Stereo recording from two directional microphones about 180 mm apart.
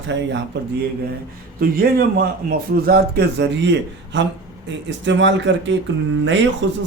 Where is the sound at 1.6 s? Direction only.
55° right (ahead or behind).